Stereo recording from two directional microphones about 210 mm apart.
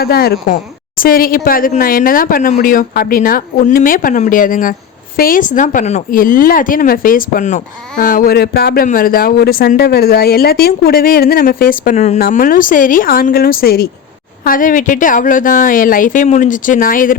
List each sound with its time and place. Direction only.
0.0 s a woman's voice: 45° left (ahead or behind)